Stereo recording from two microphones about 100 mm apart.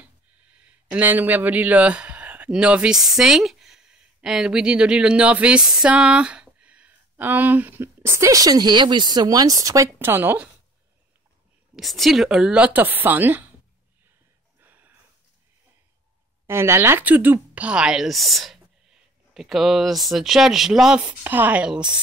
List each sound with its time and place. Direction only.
0.0 s speech: 15° right (ahead or behind); by 9.8 s 35° right (ahead or behind)
9.9 s speech: 20° right (ahead or behind)
11.7 s a woman's voice: centre (ahead or behind); by 13.5 s 15° right (ahead or behind)
14.6 s a sound: 20° right (ahead or behind)
16.4 s speech: 25° right (ahead or behind); by 21.0 s 5° right (ahead or behind)
21.0 s a woman's voice: 20° right (ahead or behind)